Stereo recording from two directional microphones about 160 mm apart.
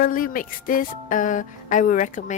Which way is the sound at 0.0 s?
60° left (ahead or behind).